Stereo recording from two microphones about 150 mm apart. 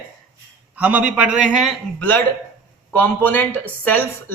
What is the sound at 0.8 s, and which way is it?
Speech, 10° right (ahead or behind).